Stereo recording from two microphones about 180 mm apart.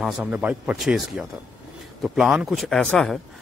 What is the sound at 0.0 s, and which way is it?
A man's voice, 10° right (ahead or behind).